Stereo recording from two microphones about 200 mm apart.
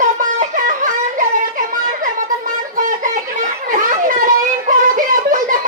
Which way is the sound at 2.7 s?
40° right (ahead or behind).